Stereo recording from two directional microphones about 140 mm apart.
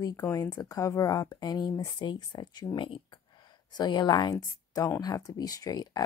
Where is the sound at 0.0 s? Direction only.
25° left (ahead or behind).